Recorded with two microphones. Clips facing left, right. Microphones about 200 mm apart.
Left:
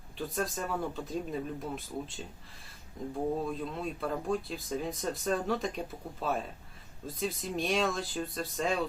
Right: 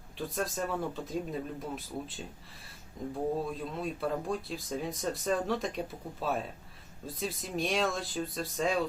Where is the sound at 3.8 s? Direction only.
Centre (ahead or behind).